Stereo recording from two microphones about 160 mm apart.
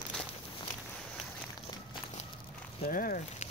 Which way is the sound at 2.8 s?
60° left (ahead or behind).